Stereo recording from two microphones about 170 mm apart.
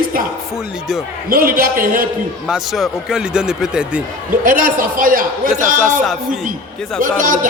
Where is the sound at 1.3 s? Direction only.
60° right (ahead or behind).